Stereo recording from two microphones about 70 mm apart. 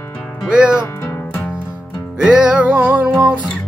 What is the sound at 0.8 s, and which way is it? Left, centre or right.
Music, left.